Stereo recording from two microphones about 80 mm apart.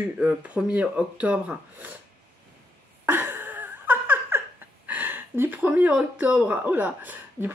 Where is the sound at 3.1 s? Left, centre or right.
Right.